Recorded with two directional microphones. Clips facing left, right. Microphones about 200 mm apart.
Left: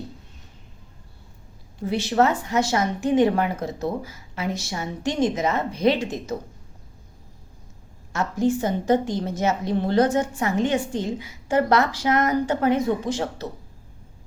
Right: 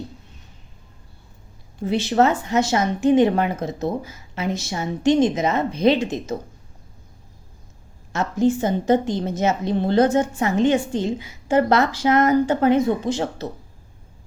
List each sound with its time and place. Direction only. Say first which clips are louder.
1.9 s a woman's voice: right 2 dB; 25° right (ahead or behind)
8.1 s a woman's voice: right 3 dB; 25° right (ahead or behind)